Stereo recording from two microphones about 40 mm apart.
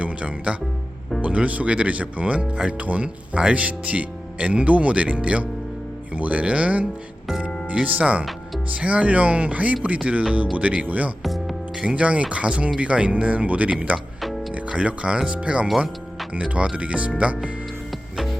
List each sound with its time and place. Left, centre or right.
0.0 s speech: right
7.9 s speech: right
8.2 s music: centre
8.7 s speech: right
11.2 s music: centre
11.8 s speech: right
14.2 s music: centre
14.5 s speech: right
16.7 s speech: right